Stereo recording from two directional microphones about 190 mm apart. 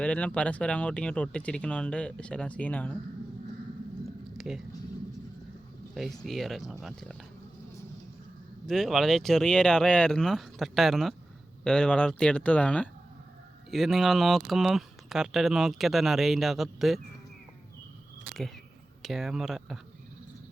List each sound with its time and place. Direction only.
0.0 s speech: 5° left (ahead or behind)
4.4 s a sound: centre (ahead or behind)
5.9 s speech: centre (ahead or behind)
8.6 s speech: centre (ahead or behind)
19.0 s speech: centre (ahead or behind)